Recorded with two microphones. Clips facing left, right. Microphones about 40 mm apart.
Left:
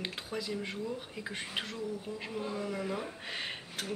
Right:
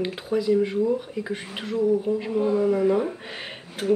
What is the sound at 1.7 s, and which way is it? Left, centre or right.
Speech, right.